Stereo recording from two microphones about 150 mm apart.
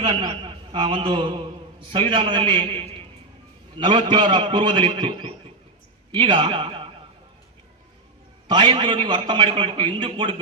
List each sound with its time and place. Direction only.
0.0 s a man's voice: 30° right (ahead or behind)
8.4 s a man's voice: 30° right (ahead or behind)